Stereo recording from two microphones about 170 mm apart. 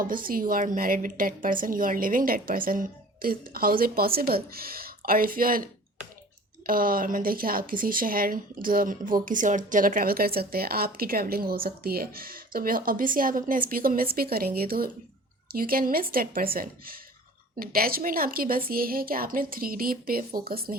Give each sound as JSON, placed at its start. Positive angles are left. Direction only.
{"t": 0.0, "sound": "speech", "side_deg": -55}